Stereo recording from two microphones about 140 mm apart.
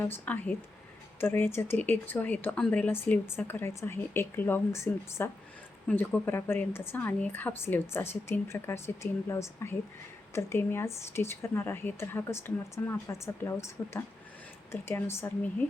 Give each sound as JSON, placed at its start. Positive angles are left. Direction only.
{"t": 0.0, "sound": "speech", "side_deg": 15}